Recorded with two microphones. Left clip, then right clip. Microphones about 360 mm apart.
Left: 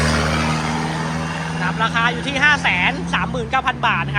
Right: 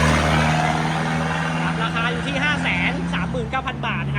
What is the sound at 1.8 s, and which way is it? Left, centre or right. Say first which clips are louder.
Speech: left 5 dB; centre.